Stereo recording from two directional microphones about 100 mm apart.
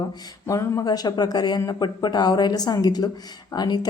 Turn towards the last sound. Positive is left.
turn(degrees=45)  # may be behind; listen again after turning